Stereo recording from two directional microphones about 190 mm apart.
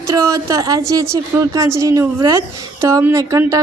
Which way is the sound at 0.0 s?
15° right (ahead or behind).